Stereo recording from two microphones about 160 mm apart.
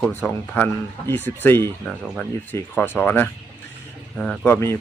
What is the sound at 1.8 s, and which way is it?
Speech, centre (ahead or behind).